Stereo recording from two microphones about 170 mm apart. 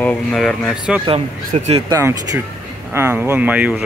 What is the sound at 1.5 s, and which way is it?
Speech, 40° right (ahead or behind).